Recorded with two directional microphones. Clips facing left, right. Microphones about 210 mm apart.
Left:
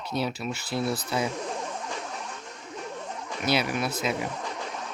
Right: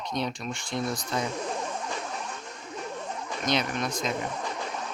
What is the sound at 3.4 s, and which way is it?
Speech, 10° left (ahead or behind).